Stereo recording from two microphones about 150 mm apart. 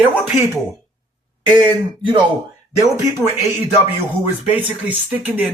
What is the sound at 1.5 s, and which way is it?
Speech, 35° right (ahead or behind).